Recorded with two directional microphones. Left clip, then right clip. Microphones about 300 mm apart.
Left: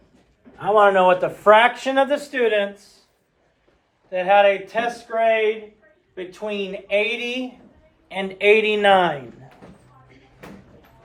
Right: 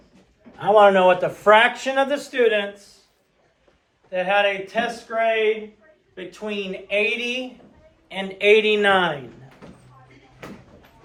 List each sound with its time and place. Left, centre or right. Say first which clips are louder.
0.6 s speech: right 1 dB; centre; by 2.6 s left
4.1 s speech: left 4 dB; left